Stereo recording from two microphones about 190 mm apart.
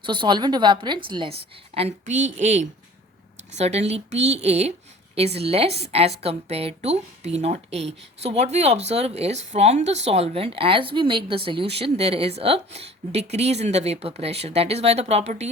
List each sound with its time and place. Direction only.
0.0 s a woman's voice: 25° right (ahead or behind)